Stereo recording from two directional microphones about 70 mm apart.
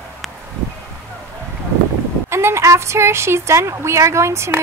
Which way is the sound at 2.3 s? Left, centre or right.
Right.